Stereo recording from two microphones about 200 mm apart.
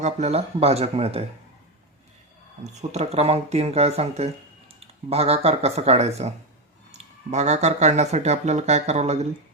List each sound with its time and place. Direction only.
0.0 s speech: 35° right (ahead or behind)
2.6 s speech: 30° right (ahead or behind)